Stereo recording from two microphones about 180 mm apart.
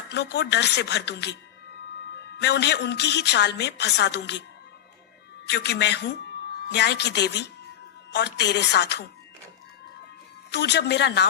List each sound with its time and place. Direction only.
0.1 s a woman's voice: 70° left (ahead or behind)
2.4 s a woman's voice: 70° left (ahead or behind)
5.5 s a woman's voice: 70° left (ahead or behind)
10.5 s a woman's voice: 70° left (ahead or behind)